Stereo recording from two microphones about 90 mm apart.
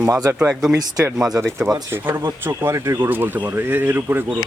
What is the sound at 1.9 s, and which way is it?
Speech, 25° right (ahead or behind).